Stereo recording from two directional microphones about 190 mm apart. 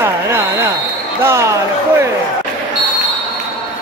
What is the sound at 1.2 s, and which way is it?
Speech, 15° right (ahead or behind).